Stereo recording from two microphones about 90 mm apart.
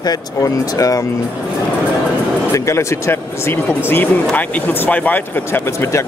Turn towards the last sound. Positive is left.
turn(degrees=30)  # may be behind; listen again after turning